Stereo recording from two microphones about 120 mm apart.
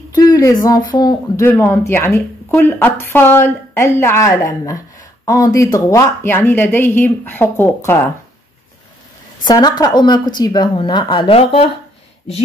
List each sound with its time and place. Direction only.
0.1 s speech: 30° left (ahead or behind)
1.4 s speech: 20° left (ahead or behind)
9.4 s a woman's voice: 35° left (ahead or behind)
11.3 s speech: 55° left (ahead or behind)